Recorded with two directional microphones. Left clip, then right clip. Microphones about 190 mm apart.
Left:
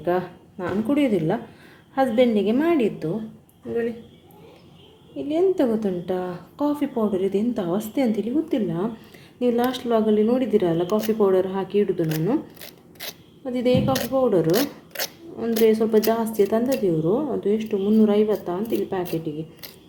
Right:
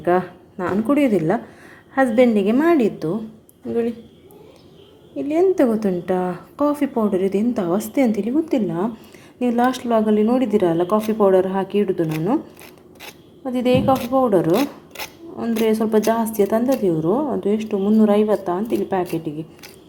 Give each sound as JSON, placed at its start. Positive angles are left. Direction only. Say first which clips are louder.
{"t": 0.0, "sound": "a woman's voice", "louder": "right 5 dB", "side_deg": -15}
{"t": 5.3, "sound": "a woman's voice", "louder": "right 4 dB", "side_deg": -20}
{"t": 13.4, "sound": "a woman's voice", "louder": "right 3 dB", "side_deg": -10}